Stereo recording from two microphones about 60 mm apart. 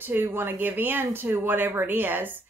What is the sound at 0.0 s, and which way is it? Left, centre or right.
Speech, right.